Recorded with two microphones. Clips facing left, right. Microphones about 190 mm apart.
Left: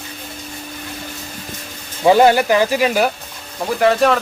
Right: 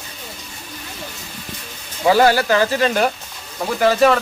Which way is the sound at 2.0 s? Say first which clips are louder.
Left 3 dB; 20° left (ahead or behind).